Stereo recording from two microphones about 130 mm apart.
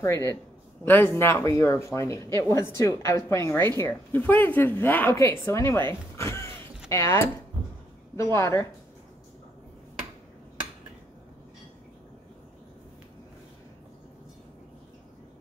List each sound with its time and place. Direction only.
0.0 s speech: 25° left (ahead or behind)